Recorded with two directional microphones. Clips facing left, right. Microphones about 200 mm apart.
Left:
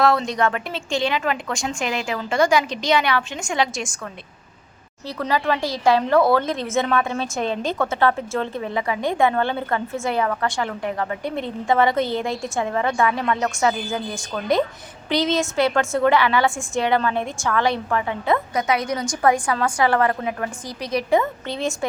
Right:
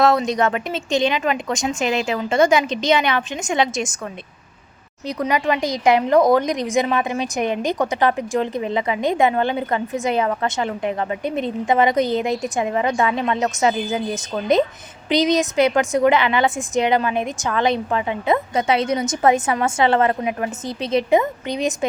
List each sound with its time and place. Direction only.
0.0 s speech: 20° right (ahead or behind)
5.0 s speech: 15° right (ahead or behind)